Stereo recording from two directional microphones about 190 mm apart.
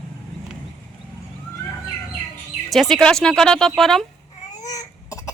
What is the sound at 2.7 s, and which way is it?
Speech, centre (ahead or behind).